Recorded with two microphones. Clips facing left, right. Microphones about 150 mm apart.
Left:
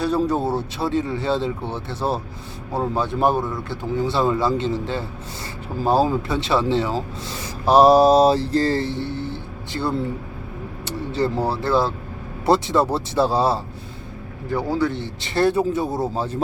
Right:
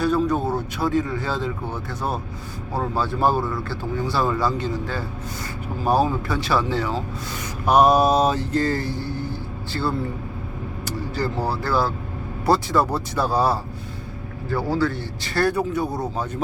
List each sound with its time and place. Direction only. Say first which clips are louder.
0.0 s speech: even; 30° left (ahead or behind)
7.3 s a sound: left 2 dB; 30° left (ahead or behind)
10.8 s vehicle: left 4 dB; 25° left (ahead or behind)
11.4 s speech: left 2 dB; 25° left (ahead or behind)
14.8 s speech: left 1 dB; 20° left (ahead or behind)